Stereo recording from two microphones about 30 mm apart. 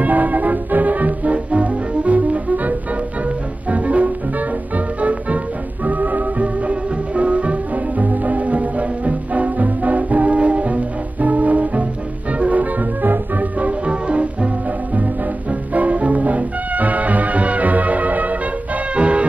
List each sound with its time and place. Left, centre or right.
0.0 s music: right
3.7 s music: right
5.9 s music: right
13.8 s music: right
15.7 s music: right
18.9 s music: right